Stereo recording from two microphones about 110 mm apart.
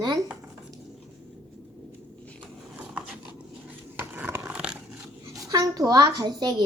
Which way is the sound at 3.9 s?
15° right (ahead or behind).